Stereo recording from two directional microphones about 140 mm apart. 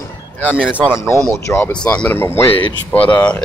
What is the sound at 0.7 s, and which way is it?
Speech, 5° right (ahead or behind).